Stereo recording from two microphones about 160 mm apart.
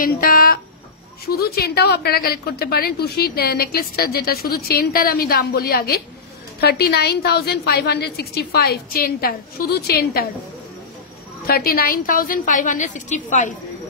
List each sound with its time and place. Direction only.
0.0 s speech: 60° left (ahead or behind)
1.2 s a woman's voice: 75° left (ahead or behind)
6.6 s a woman's voice: 85° left
11.4 s a woman's voice: 70° left (ahead or behind); by 13.6 s 50° left (ahead or behind)